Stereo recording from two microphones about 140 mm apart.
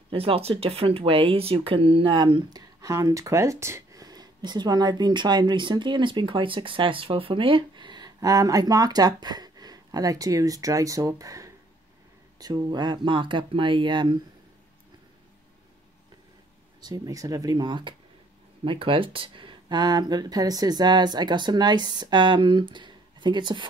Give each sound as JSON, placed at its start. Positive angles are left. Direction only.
{"t": 0.1, "sound": "speech", "side_deg": -45}
{"t": 16.8, "sound": "speech", "side_deg": -30}